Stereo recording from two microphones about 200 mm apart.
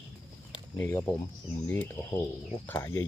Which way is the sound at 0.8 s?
10° left (ahead or behind).